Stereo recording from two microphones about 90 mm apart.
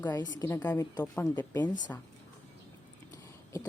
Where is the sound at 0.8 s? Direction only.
35° left (ahead or behind).